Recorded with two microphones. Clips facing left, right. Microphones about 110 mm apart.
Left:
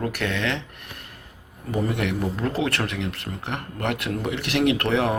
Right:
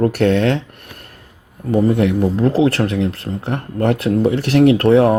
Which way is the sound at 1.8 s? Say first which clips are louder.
Right 10 dB; 30° right (ahead or behind).